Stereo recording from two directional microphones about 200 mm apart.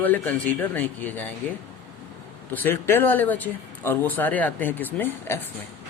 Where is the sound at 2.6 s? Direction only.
10° left (ahead or behind).